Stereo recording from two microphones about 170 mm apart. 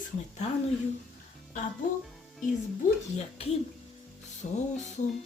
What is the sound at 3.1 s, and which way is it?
Speech, 35° left (ahead or behind).